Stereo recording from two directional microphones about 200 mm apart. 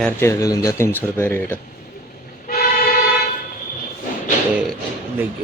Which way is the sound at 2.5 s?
45° left (ahead or behind).